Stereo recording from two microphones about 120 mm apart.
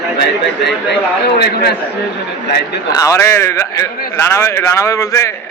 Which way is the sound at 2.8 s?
30° left (ahead or behind).